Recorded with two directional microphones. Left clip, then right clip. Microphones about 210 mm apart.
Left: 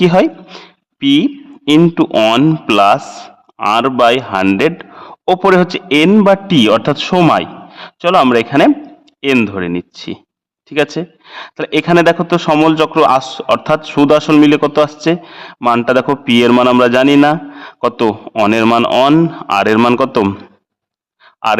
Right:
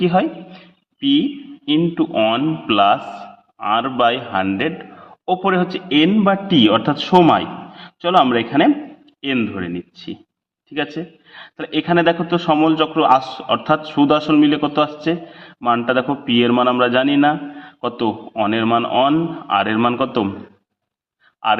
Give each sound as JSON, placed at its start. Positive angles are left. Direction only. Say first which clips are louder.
{"t": 0.0, "sound": "a man's voice", "louder": "left 7 dB", "side_deg": 50}